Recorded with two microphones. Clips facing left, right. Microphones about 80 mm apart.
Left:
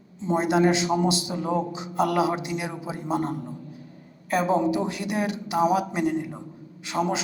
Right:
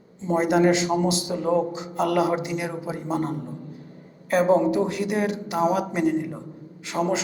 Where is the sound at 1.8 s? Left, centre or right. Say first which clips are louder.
Right 1 dB; right.